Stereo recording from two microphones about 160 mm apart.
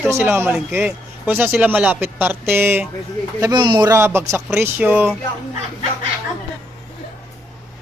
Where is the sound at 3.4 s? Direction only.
25° right (ahead or behind).